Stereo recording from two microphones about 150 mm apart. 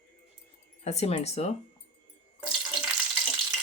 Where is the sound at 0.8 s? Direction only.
45° left (ahead or behind).